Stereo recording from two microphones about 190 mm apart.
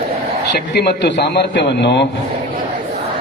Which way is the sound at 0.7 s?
60° left (ahead or behind).